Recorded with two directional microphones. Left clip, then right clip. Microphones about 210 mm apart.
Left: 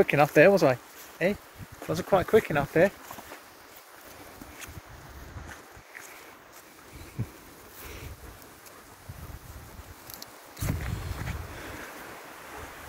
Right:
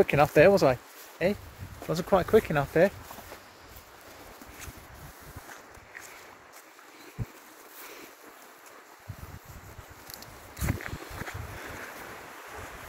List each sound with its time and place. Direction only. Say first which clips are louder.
0.0 s speech: left 1 dB; 10° right (ahead or behind)